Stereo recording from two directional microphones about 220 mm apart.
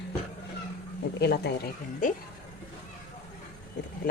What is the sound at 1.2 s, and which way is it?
Speech, 50° left (ahead or behind).